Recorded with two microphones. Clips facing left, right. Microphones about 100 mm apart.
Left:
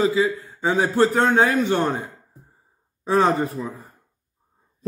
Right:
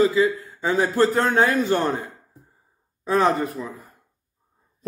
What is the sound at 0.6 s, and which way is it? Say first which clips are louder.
A man's voice: left 1 dB; 20° left (ahead or behind).